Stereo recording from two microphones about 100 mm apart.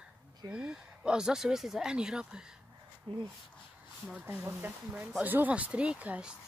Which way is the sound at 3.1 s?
60° right (ahead or behind).